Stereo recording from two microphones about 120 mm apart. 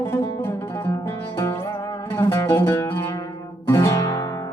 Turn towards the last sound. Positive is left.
turn(degrees=25)  # may be behind; listen again after turning